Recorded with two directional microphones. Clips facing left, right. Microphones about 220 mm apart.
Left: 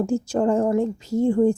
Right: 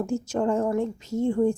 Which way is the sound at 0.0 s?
30° left (ahead or behind).